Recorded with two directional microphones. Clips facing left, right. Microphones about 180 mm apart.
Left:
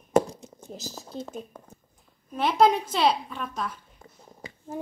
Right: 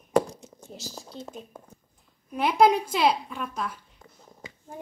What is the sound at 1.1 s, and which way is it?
Speech, 40° left (ahead or behind).